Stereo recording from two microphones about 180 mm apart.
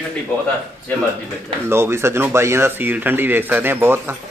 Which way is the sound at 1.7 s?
15° right (ahead or behind).